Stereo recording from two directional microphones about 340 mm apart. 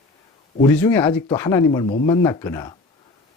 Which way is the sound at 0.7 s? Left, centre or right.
Centre.